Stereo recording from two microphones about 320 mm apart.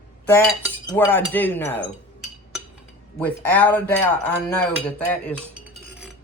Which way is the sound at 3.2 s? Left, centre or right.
Centre.